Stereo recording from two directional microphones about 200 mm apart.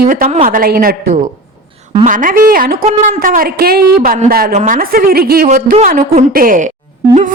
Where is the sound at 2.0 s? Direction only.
40° right (ahead or behind).